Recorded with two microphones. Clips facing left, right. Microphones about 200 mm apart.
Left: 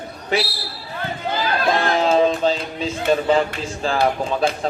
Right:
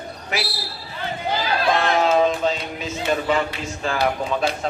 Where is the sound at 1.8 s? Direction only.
30° left (ahead or behind).